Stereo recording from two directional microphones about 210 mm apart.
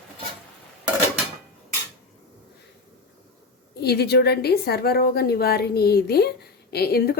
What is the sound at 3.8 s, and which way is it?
Speech, 50° left (ahead or behind).